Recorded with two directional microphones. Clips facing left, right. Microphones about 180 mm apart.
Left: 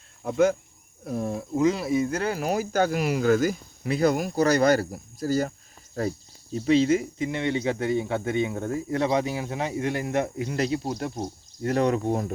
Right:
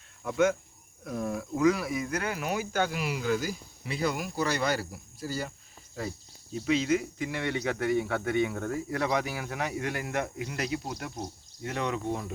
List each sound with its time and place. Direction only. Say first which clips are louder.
0.2 s speech: left 4 dB; 35° left (ahead or behind)
6.7 s speech: left 6 dB; 30° left (ahead or behind)